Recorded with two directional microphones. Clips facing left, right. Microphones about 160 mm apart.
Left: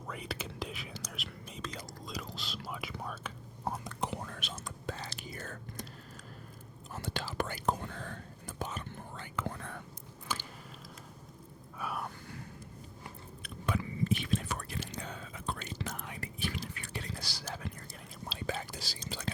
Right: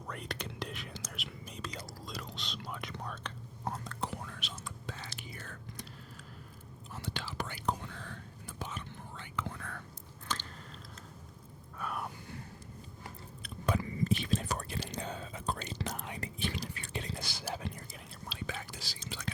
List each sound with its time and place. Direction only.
0.1 s whispering: centre (ahead or behind)
4.3 s whispering: 45° left (ahead or behind)
6.9 s whispering: 45° left (ahead or behind)
10.3 s biting: 10° left (ahead or behind)
11.8 s a sound: 5° left (ahead or behind)
13.4 s whispering: 35° right (ahead or behind)
14.7 s whispering: 20° right (ahead or behind)
18.3 s whispering: 35° left (ahead or behind)